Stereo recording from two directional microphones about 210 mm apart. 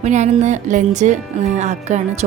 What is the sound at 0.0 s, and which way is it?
Music, 35° right (ahead or behind).